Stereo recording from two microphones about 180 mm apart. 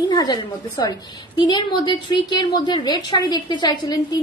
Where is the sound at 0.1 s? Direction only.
20° left (ahead or behind).